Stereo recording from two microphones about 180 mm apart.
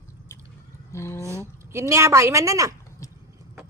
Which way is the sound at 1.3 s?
15° right (ahead or behind).